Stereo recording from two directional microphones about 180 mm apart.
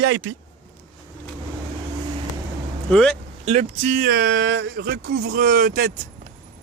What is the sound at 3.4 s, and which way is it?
Speech, 35° right (ahead or behind).